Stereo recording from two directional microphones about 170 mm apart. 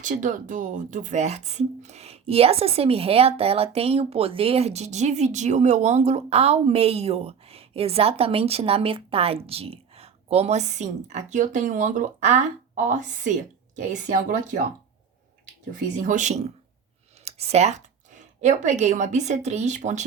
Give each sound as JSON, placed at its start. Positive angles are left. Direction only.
{"t": 0.0, "sound": "speech", "side_deg": -50}
{"t": 15.7, "sound": "speech", "side_deg": -50}